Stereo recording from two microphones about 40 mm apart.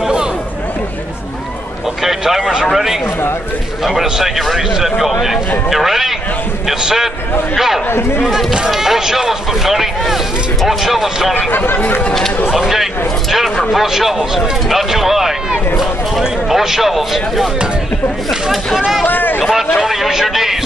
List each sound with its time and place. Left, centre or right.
2.0 s speech: centre
13.7 s speech: centre
19.0 s speech: left
19.4 s speech: centre